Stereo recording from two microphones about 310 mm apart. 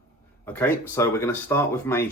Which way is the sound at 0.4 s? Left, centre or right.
Centre.